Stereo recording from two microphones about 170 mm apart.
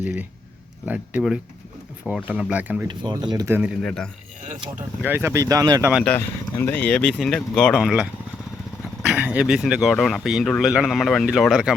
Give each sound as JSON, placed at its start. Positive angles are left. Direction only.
{"t": 0.0, "sound": "speech", "side_deg": -10}
{"t": 2.8, "sound": "speech", "side_deg": -25}
{"t": 3.8, "sound": "speech", "side_deg": 5}
{"t": 5.0, "sound": "speech", "side_deg": -15}
{"t": 6.1, "sound": "speech", "side_deg": 15}
{"t": 9.0, "sound": "speech", "side_deg": -5}